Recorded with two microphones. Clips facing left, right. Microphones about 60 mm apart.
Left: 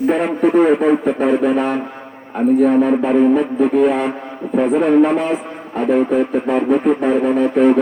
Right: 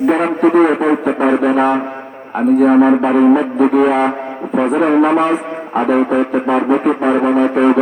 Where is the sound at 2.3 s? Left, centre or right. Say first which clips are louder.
Right 3 dB; right.